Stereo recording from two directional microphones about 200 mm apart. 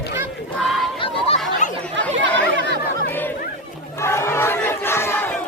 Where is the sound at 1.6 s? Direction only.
40° left (ahead or behind).